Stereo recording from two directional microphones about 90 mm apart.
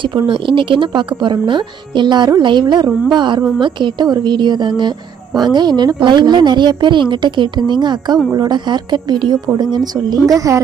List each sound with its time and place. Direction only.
0.0 s a woman's voice: 65° right (ahead or behind); by 10.2 s 50° right (ahead or behind)
10.3 s a woman's voice: 40° right (ahead or behind)